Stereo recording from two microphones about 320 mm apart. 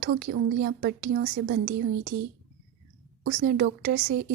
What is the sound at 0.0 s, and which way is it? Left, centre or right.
A woman's voice, right.